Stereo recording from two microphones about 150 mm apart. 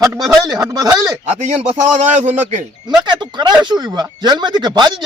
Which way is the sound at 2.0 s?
55° right (ahead or behind).